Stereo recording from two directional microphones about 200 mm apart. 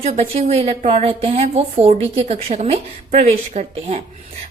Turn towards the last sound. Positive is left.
turn(degrees=-35)  # may be behind; listen again after turning